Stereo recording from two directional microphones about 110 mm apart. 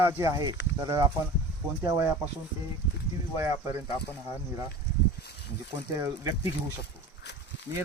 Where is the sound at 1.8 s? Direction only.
25° right (ahead or behind).